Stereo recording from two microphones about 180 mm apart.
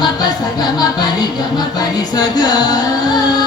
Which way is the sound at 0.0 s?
20° left (ahead or behind).